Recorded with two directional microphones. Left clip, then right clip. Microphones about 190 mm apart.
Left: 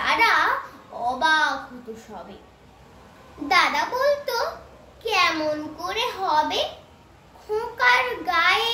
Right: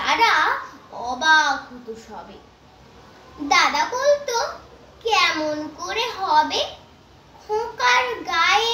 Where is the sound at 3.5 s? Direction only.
20° left (ahead or behind).